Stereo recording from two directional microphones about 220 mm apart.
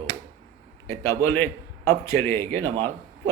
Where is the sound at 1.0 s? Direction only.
10° left (ahead or behind).